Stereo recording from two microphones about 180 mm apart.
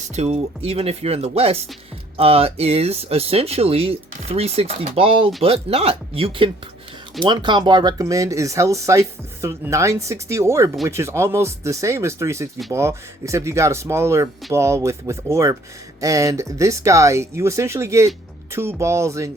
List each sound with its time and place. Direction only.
0.0 s speech: 40° right (ahead or behind); by 19.3 s 15° right (ahead or behind)